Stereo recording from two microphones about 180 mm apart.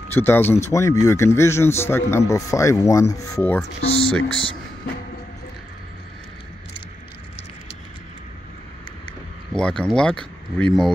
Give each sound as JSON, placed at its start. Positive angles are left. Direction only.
{"t": 0.1, "sound": "a man's voice", "side_deg": 10}
{"t": 3.8, "sound": "speech", "side_deg": 30}
{"t": 9.5, "sound": "speech", "side_deg": 5}